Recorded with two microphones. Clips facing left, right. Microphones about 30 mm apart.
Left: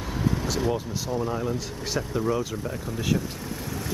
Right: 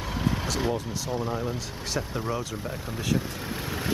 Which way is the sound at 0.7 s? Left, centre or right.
Centre.